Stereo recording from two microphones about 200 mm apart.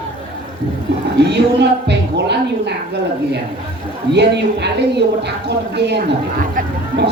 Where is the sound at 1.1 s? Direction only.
55° right (ahead or behind).